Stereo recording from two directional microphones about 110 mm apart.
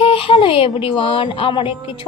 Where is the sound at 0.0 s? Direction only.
55° left (ahead or behind).